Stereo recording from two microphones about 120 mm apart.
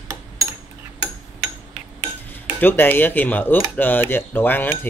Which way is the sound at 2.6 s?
15° left (ahead or behind).